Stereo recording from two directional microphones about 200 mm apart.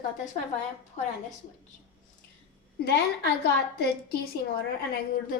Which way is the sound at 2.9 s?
55° left (ahead or behind).